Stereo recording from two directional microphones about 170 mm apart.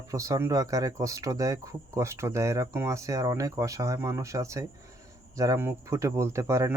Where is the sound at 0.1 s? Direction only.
20° right (ahead or behind).